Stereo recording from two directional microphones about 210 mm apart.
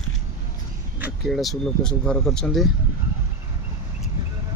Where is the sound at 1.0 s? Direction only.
Centre (ahead or behind).